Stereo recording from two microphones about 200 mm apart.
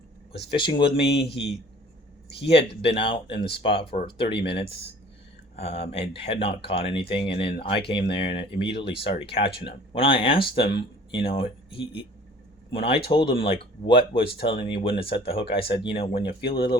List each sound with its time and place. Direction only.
0.8 s a man's voice: 55° left (ahead or behind)
2.4 s speech: 30° left (ahead or behind)